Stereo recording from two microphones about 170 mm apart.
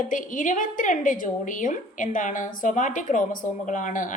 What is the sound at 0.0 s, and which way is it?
A woman's voice, 50° left (ahead or behind).